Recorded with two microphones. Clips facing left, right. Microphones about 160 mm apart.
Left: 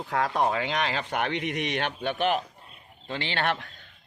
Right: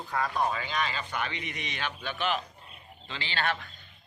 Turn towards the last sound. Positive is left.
turn(degrees=65)  # may be behind; listen again after turning